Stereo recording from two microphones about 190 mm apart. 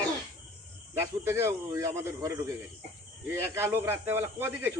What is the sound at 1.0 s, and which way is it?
Speech, 15° right (ahead or behind).